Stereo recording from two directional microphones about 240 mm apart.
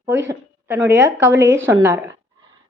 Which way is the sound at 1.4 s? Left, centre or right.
Right.